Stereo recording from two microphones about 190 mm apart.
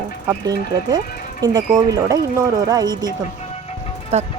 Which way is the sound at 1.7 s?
20° right (ahead or behind).